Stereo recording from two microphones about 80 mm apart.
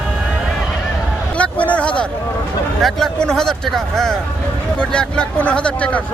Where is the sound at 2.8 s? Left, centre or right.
Centre.